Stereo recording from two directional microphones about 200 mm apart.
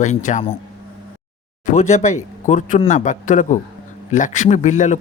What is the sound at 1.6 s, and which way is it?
Speech, 35° left (ahead or behind).